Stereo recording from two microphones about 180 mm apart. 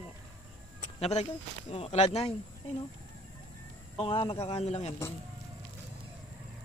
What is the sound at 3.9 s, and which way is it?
A man's voice, 30° left (ahead or behind).